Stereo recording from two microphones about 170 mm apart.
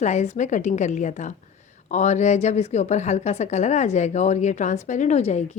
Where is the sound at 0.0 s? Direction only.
40° left (ahead or behind).